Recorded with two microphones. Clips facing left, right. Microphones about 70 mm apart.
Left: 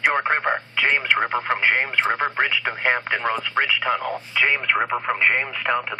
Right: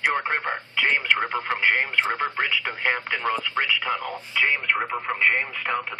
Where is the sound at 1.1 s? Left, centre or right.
Left.